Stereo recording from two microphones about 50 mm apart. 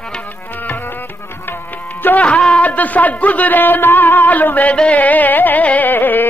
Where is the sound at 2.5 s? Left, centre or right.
Left.